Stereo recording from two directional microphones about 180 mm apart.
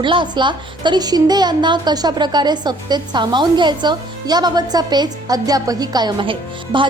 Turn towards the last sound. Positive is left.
turn(degrees=-25)  # may be behind; listen again after turning